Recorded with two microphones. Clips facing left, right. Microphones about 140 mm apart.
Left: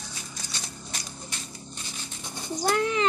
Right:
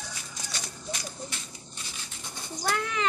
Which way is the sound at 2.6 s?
25° left (ahead or behind).